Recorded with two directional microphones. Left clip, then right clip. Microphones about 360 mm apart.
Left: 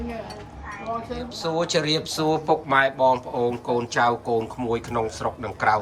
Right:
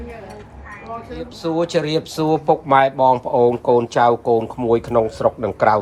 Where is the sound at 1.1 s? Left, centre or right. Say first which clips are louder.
Right 6 dB; centre.